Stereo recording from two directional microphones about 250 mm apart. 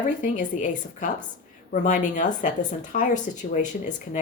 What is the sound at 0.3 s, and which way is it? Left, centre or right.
Speech, left.